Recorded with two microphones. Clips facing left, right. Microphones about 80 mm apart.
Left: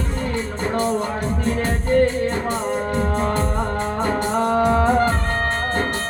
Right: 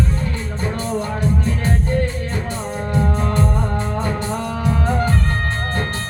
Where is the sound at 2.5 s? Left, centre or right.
Left.